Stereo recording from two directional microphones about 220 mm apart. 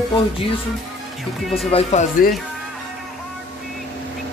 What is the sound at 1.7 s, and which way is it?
Speech, 30° left (ahead or behind).